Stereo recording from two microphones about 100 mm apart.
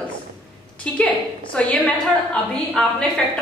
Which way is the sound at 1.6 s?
10° left (ahead or behind).